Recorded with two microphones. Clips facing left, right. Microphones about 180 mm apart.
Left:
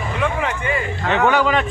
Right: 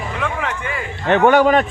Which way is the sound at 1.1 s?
50° right (ahead or behind).